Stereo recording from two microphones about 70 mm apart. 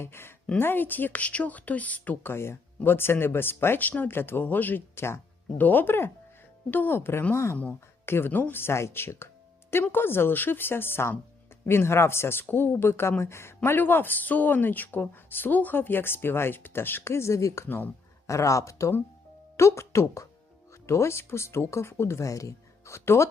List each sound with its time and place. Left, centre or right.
0.0 s speech: left
2.2 s speech: left
8.0 s speech: left
18.3 s speech: left